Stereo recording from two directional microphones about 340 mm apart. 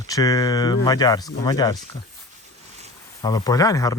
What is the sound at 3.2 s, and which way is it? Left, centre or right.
Speech, centre.